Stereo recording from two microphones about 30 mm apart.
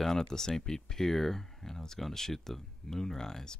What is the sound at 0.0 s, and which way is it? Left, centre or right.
Speech, centre.